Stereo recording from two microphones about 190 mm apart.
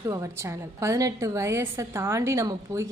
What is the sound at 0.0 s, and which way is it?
A woman's voice, 15° right (ahead or behind).